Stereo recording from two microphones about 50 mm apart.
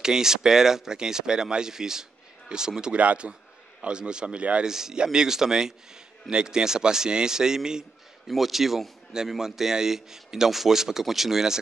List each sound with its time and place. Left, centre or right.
0.0 s a man's voice: centre
3.0 s a man's voice: right
4.6 s a man's voice: centre
8.3 s a man's voice: centre